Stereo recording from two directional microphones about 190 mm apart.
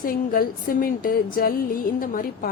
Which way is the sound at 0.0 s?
50° left (ahead or behind).